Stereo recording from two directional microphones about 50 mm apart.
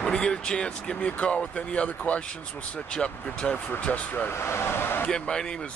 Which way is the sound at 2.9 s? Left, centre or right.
Centre.